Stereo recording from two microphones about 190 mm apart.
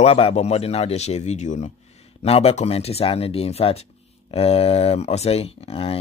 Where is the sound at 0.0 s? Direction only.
30° left (ahead or behind).